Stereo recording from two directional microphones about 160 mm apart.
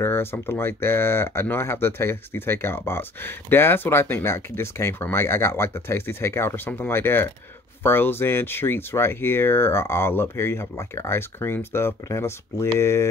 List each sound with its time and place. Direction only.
0.0 s speech: 15° left (ahead or behind)